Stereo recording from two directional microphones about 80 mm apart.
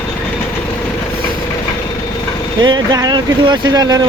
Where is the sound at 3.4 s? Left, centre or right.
Right.